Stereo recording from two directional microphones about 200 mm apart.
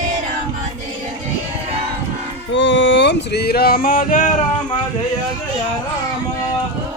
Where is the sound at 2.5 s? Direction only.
65° left (ahead or behind); by 4.2 s 45° left (ahead or behind).